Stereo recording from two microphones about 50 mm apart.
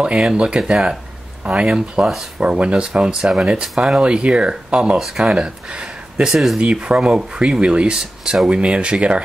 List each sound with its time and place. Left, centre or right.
0.2 s speech: centre
4.9 s speech: centre
5.2 s speech: right
6.2 s speech: centre
6.6 s speech: right